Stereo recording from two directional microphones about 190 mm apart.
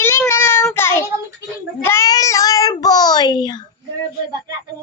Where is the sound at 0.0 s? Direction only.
15° left (ahead or behind).